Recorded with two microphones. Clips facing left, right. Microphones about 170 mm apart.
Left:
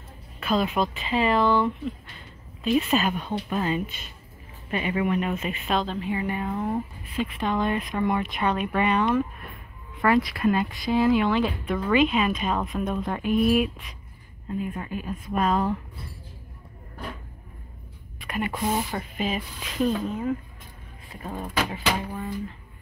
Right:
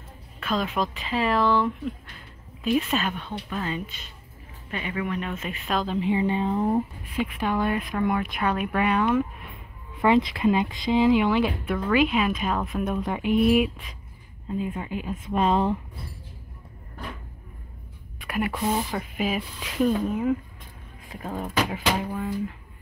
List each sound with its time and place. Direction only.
0.4 s speech: 5° left (ahead or behind)
5.7 s speech: centre (ahead or behind)
5.9 s speech: 20° right (ahead or behind)
7.4 s speech: 10° right (ahead or behind)
10.0 s speech: 20° right (ahead or behind)
18.2 s a sound: 5° right (ahead or behind)
18.5 s speech: centre (ahead or behind)